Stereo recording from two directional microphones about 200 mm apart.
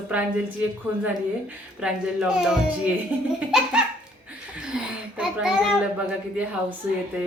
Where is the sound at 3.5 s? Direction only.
Centre (ahead or behind).